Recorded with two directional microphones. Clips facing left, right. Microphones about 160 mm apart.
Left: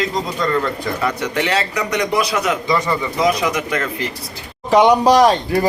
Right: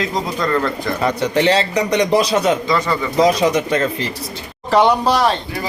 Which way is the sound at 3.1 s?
30° right (ahead or behind).